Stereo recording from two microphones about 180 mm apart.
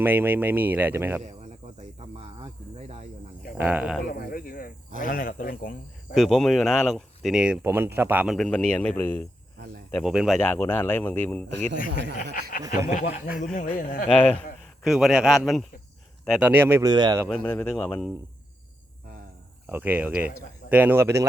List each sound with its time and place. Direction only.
0.0 s speech: 10° right (ahead or behind)
2.1 s cricket: 35° right (ahead or behind)
3.6 s speech: 10° right (ahead or behind)
4.1 s a sound: 55° left (ahead or behind)
4.9 s speech: 50° left (ahead or behind)
6.1 s speech: centre (ahead or behind)
8.4 s speech: 5° left (ahead or behind)
9.9 s speech: centre (ahead or behind)
12.1 s speech: 55° left (ahead or behind)
14.1 s speech: 5° left (ahead or behind); by 16.9 s 10° right (ahead or behind)
16.9 s speech: 25° right (ahead or behind)
17.2 s speech: 5° left (ahead or behind)
19.6 s speech: 10° right (ahead or behind)